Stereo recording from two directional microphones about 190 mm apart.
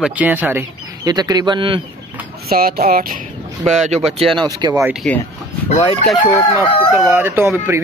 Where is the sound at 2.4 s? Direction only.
50° right (ahead or behind).